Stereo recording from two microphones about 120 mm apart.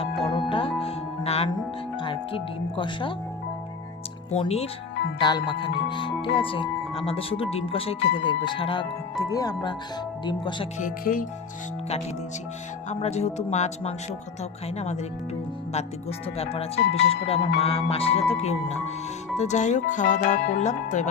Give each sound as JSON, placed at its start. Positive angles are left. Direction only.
{"t": 0.3, "sound": "music", "side_deg": 40}
{"t": 0.8, "sound": "music", "side_deg": 55}
{"t": 2.0, "sound": "speech", "side_deg": 45}
{"t": 4.4, "sound": "speech", "side_deg": 55}
{"t": 5.2, "sound": "speech", "side_deg": 40}
{"t": 9.3, "sound": "speech", "side_deg": 30}
{"t": 12.9, "sound": "speech", "side_deg": 65}
{"t": 15.7, "sound": "speech", "side_deg": 60}
{"t": 19.4, "sound": "speech", "side_deg": 80}